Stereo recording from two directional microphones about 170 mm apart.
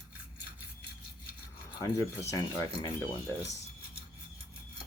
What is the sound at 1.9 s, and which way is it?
Speech, 15° left (ahead or behind).